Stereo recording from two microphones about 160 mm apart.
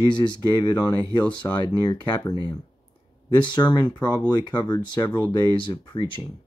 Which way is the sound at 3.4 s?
30° left (ahead or behind).